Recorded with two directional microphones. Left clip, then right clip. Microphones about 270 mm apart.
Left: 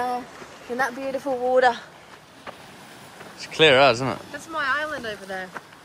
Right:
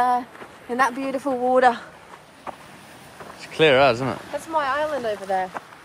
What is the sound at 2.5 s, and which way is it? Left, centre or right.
Vehicle, centre.